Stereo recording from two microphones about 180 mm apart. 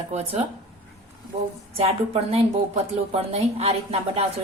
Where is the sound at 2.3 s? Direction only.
35° right (ahead or behind).